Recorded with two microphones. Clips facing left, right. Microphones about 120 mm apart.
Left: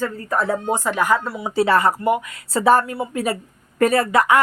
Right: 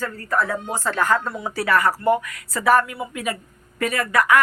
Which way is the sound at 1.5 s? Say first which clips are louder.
Left 4 dB; 25° left (ahead or behind).